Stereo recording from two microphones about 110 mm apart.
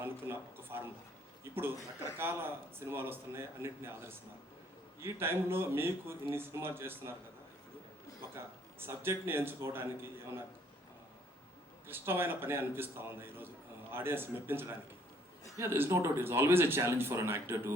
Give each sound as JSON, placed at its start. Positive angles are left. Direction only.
{"t": 0.0, "sound": "a sound", "side_deg": -20}
{"t": 2.1, "sound": "speech", "side_deg": -20}
{"t": 4.9, "sound": "speech", "side_deg": -20}
{"t": 8.8, "sound": "speech", "side_deg": -20}
{"t": 11.9, "sound": "speech", "side_deg": -20}